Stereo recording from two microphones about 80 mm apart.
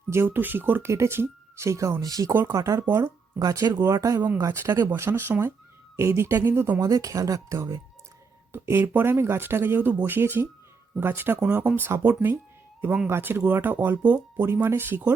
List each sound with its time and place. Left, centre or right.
0.1 s speech: right
3.3 s speech: right
6.8 s speech: right
8.5 s speech: right
14.4 s speech: right